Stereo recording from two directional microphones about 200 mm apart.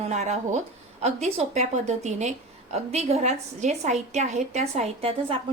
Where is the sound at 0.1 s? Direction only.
35° right (ahead or behind).